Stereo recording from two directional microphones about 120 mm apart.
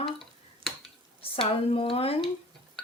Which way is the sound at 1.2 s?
50° left (ahead or behind).